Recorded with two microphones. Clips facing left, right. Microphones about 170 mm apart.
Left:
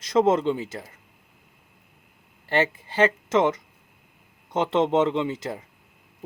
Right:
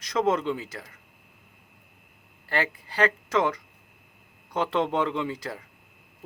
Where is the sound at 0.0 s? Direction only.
25° left (ahead or behind).